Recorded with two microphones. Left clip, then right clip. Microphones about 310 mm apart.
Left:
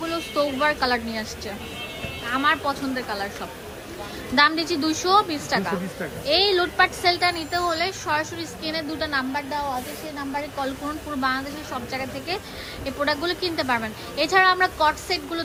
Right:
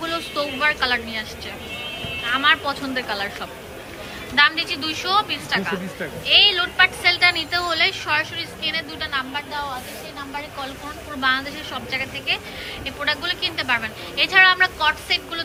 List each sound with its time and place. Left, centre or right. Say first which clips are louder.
0.0 s music: even; centre
2.3 s a woman's voice: right 3 dB; centre
4.4 s a woman's voice: right 2 dB; centre
11.2 s a woman's voice: right 5 dB; centre